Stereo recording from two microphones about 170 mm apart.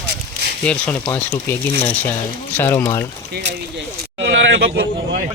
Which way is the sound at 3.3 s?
85° right.